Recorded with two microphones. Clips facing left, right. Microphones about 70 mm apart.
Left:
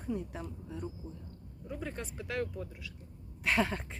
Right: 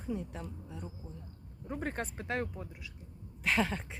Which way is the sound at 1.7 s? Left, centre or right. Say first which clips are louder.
Right 3 dB; right.